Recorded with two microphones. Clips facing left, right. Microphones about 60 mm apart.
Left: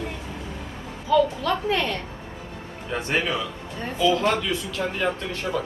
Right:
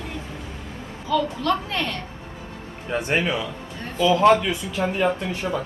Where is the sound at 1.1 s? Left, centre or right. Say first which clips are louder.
Left 2 dB; centre.